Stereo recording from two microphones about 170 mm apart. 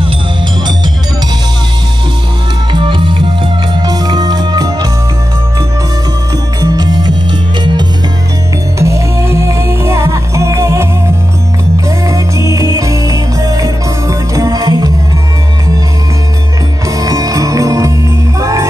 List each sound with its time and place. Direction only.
2.7 s music: 30° right (ahead or behind)
6.6 s music: 25° right (ahead or behind)
8.7 s music: 15° right (ahead or behind)
12.1 s music: 20° right (ahead or behind)
16.9 s music: 20° right (ahead or behind)